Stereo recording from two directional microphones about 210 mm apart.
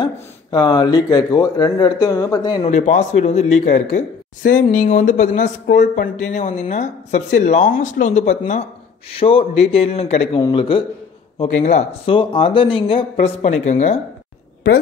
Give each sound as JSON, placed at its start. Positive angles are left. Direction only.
{"t": 0.0, "sound": "speech", "side_deg": 20}
{"t": 2.7, "sound": "speech", "side_deg": 35}